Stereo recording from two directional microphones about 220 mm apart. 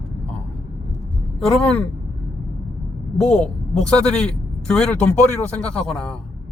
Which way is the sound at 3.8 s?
5° left (ahead or behind).